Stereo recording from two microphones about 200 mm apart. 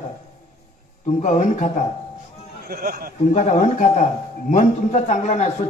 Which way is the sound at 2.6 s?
50° right (ahead or behind).